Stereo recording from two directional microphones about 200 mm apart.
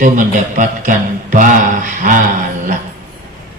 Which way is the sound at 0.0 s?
40° right (ahead or behind).